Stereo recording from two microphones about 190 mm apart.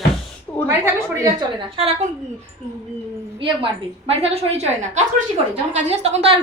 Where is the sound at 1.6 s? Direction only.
30° right (ahead or behind).